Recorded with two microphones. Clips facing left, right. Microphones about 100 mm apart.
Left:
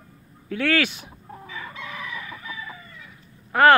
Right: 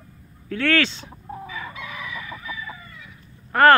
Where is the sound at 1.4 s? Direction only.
10° right (ahead or behind).